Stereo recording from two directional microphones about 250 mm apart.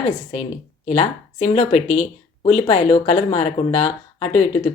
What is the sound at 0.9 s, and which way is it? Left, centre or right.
Speech, left.